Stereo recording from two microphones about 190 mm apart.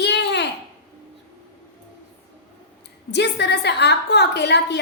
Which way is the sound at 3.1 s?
65° left (ahead or behind).